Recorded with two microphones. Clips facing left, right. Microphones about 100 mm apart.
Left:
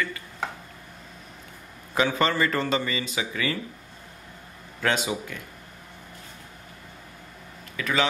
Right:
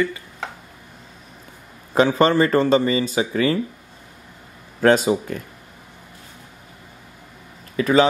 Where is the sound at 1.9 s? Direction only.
35° right (ahead or behind).